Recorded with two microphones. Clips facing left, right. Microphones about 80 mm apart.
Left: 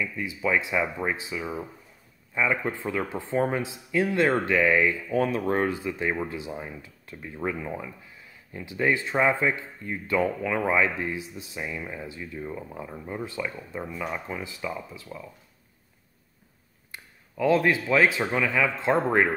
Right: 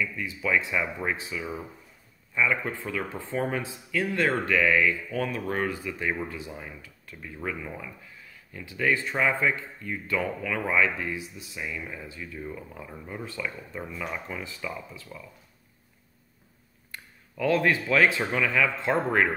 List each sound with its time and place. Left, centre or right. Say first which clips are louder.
0.0 s speech: left 2 dB; centre
2.3 s speech: left 1 dB; left
16.9 s speech: left 1 dB; centre